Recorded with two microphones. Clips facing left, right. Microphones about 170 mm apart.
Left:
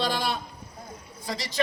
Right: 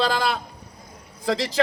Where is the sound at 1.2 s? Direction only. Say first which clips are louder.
Right 10 dB; 90° right.